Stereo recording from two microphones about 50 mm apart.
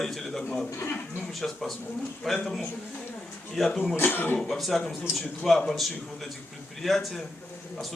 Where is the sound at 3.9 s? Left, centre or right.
Left.